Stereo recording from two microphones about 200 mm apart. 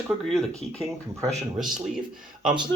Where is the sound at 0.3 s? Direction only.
15° right (ahead or behind).